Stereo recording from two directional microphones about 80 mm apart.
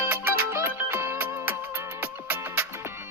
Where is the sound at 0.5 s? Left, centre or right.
Right.